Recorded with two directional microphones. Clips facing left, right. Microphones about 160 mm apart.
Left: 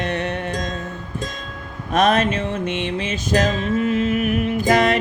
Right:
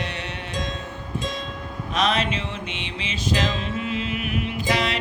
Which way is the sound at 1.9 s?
50° left (ahead or behind).